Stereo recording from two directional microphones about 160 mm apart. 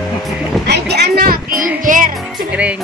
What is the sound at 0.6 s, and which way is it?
Music, 90° right.